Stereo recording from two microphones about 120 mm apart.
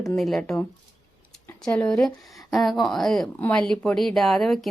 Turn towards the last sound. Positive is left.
turn(degrees=0)  # may be behind; listen again after turning